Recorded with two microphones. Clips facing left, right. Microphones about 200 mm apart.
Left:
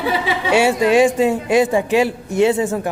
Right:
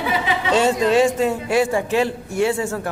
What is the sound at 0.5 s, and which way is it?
A man's voice, 10° left (ahead or behind).